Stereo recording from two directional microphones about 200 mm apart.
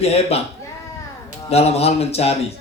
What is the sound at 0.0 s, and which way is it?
Speech, 30° left (ahead or behind).